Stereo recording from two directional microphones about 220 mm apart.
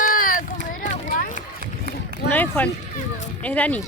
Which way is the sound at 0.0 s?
40° left (ahead or behind).